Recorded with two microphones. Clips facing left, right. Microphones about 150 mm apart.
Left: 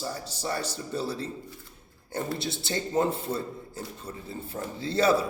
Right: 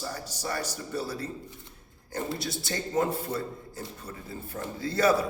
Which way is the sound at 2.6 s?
25° left (ahead or behind).